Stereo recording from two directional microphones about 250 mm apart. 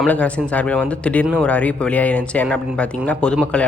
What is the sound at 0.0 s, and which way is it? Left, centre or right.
Speech, centre.